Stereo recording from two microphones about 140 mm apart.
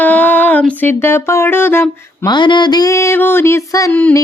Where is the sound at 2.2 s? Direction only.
30° left (ahead or behind).